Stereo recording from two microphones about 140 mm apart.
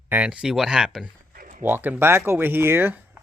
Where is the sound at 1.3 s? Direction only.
70° right (ahead or behind).